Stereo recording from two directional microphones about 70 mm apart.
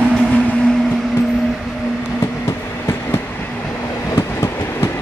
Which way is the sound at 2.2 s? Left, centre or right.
Left.